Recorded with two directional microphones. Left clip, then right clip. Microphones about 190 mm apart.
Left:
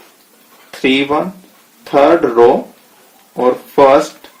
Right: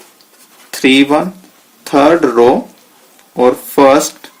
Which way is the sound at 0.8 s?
45° right (ahead or behind).